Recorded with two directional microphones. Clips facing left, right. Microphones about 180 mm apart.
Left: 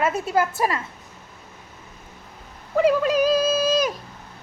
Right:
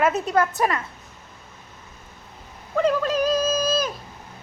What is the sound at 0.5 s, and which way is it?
Speech, 25° left (ahead or behind).